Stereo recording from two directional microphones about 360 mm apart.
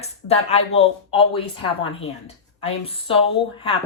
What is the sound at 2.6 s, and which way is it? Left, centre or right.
Speech, centre.